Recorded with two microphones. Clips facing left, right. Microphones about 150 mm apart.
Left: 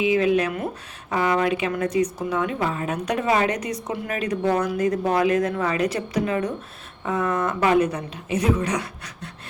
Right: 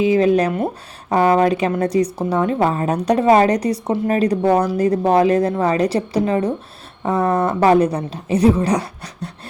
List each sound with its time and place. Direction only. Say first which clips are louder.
0.0 s speech: right 5 dB; 35° right (ahead or behind)